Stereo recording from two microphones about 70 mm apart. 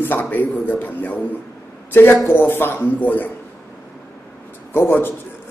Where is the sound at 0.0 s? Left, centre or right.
Left.